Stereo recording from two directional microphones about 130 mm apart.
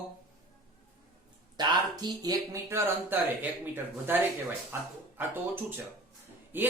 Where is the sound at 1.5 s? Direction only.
30° right (ahead or behind).